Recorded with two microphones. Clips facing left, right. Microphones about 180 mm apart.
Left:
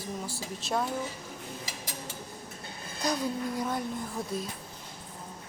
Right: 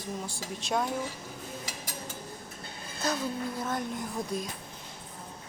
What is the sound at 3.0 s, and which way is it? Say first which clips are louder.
Speech: left 1 dB; 15° left (ahead or behind).